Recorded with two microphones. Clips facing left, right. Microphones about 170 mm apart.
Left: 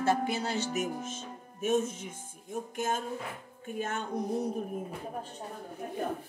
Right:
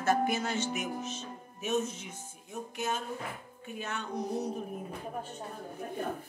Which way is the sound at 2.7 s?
45° left (ahead or behind).